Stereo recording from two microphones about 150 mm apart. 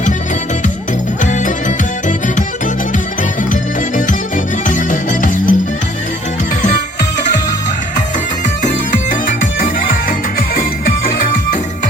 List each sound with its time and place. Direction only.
1.2 s music: 55° left (ahead or behind)
3.5 s music: 60° left (ahead or behind)
9.4 s music: 70° left (ahead or behind)